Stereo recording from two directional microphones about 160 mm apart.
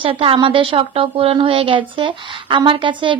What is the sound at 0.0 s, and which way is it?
A woman's voice, 35° right (ahead or behind).